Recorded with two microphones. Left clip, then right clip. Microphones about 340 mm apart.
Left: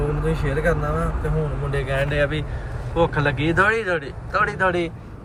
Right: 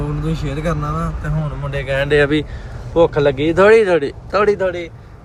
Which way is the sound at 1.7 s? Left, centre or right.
Right.